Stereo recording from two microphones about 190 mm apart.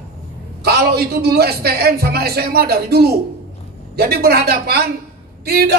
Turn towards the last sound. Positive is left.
turn(degrees=-55)  # may be behind; listen again after turning